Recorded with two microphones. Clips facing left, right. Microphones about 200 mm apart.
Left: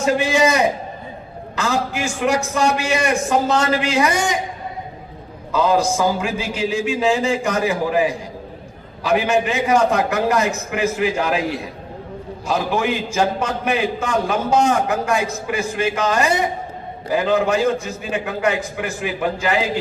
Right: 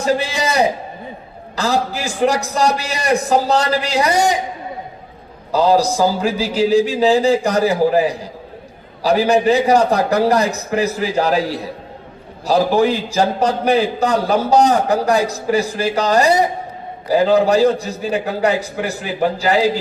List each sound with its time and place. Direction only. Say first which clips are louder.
0.0 s a man's voice: left 2 dB; 35° right (ahead or behind)
5.5 s a man's voice: right 3 dB; 35° right (ahead or behind)